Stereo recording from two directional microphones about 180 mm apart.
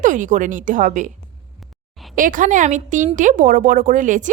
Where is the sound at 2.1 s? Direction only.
45° right (ahead or behind).